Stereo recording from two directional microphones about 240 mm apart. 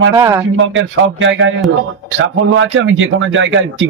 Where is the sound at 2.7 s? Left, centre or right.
Right.